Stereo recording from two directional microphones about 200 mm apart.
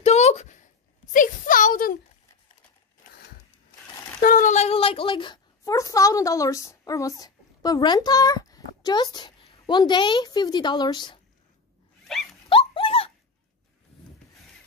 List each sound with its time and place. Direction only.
0.0 s a sound: 35° left (ahead or behind)
4.2 s a woman's voice: 40° left (ahead or behind); by 11.1 s 20° left (ahead or behind)
12.1 s dog: centre (ahead or behind)
12.4 s dog: 25° left (ahead or behind)